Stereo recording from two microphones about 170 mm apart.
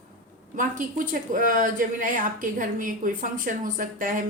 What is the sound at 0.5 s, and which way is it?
Speech, 50° right (ahead or behind).